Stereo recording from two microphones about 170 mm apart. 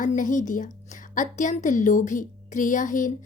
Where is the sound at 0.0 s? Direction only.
50° left (ahead or behind).